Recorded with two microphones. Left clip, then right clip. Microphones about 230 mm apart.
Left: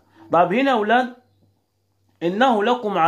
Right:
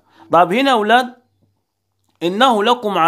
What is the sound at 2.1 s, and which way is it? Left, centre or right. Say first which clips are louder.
Speech: right 4 dB; right.